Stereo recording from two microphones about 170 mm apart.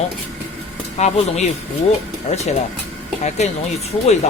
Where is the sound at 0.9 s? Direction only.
40° left (ahead or behind).